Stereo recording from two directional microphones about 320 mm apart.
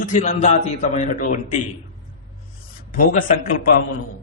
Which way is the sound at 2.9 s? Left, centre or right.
Left.